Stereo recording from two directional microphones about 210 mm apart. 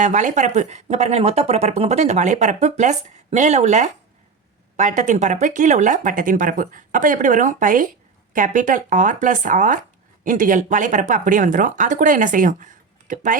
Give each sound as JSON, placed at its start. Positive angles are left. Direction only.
{"t": 0.0, "sound": "speech", "side_deg": -35}